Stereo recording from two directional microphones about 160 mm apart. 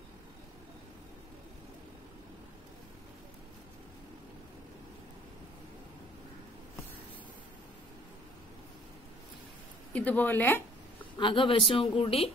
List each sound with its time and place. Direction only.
9.9 s speech: 10° left (ahead or behind)
11.1 s speech: 30° left (ahead or behind)